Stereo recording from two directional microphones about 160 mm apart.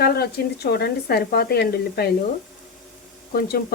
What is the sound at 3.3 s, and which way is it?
Speech, 75° left (ahead or behind).